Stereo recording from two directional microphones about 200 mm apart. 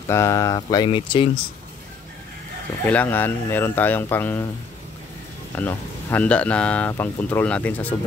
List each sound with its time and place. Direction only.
0.1 s speech: 15° left (ahead or behind)
2.9 s speech: 10° left (ahead or behind)
5.6 s speech: 10° left (ahead or behind)